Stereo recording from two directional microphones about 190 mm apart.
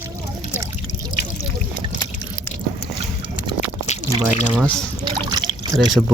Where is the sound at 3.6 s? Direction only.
35° left (ahead or behind).